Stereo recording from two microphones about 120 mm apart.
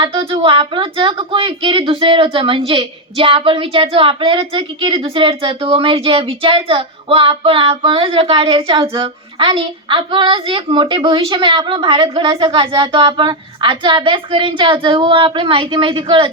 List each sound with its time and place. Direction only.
0.0 s a woman's voice: 50° right (ahead or behind)